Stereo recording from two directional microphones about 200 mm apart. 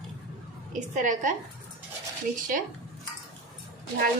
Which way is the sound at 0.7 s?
40° right (ahead or behind).